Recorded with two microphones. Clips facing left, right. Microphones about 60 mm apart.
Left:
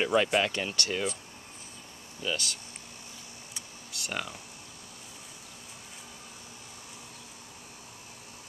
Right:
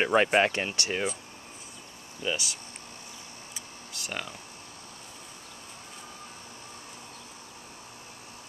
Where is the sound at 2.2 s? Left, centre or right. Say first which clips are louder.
Right 1 dB; centre.